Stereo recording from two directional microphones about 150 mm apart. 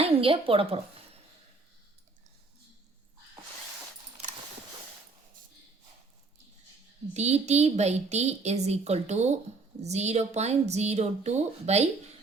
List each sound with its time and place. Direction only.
0.0 s a woman's voice: 40° right (ahead or behind)
7.1 s a woman's voice: 45° right (ahead or behind)